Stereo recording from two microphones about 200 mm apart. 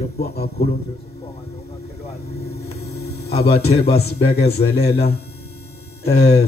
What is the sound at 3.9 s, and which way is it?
Speech, 55° left (ahead or behind).